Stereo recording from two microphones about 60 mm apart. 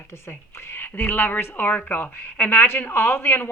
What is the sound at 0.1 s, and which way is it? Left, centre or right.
A woman's voice, left.